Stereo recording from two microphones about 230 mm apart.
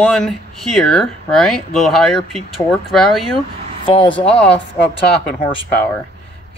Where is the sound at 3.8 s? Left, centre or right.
Left.